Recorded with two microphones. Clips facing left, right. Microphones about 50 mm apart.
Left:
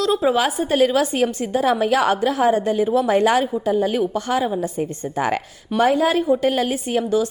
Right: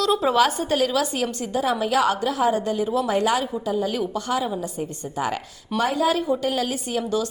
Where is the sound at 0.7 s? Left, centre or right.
Left.